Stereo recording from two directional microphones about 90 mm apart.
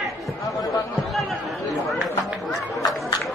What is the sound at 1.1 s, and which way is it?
Chatter, centre (ahead or behind).